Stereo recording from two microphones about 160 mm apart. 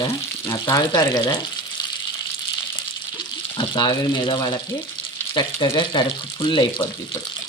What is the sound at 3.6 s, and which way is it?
Speech, 30° left (ahead or behind).